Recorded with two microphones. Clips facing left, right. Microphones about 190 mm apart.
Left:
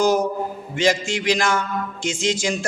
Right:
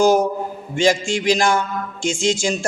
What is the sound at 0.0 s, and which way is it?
Speech, 30° right (ahead or behind).